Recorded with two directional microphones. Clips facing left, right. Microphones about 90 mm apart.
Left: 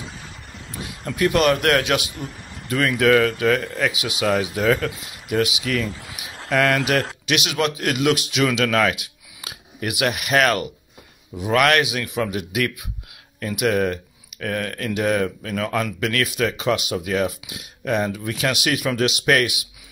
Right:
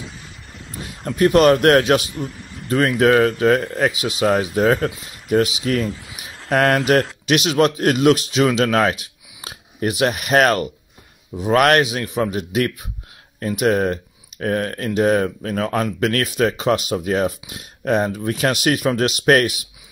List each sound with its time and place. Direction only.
0.8 s speech: 35° right (ahead or behind)